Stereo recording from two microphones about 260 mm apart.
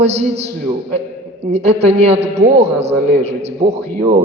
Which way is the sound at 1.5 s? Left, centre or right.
Right.